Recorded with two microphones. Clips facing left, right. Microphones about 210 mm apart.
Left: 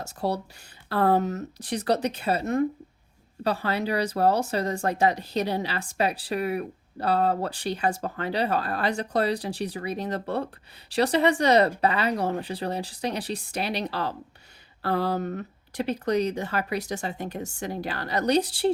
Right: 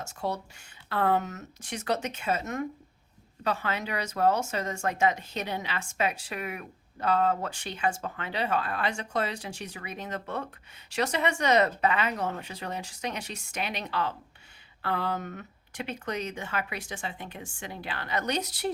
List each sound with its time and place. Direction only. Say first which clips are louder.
0.0 s speech: left 4 dB; 35° left (ahead or behind)